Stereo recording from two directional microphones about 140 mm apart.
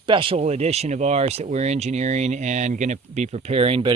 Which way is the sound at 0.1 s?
40° right (ahead or behind).